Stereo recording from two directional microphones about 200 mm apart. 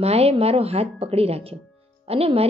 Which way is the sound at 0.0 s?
30° right (ahead or behind).